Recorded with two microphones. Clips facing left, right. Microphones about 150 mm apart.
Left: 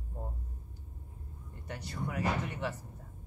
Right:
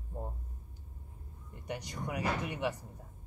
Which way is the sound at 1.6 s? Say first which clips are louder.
Even; 15° right (ahead or behind).